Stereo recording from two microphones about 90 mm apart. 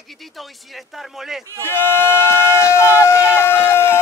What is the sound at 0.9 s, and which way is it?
Speech, 5° right (ahead or behind).